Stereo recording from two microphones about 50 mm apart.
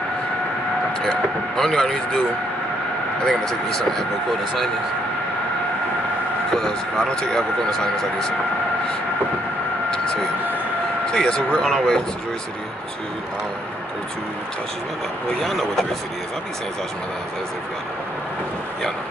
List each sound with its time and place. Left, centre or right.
1.6 s speech: centre
3.3 s speech: centre
6.5 s speech: centre
11.1 s speech: centre
15.4 s speech: centre